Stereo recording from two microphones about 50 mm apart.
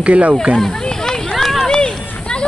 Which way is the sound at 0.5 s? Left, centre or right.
Centre.